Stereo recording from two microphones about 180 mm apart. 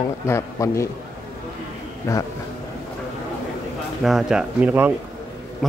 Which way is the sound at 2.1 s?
15° left (ahead or behind).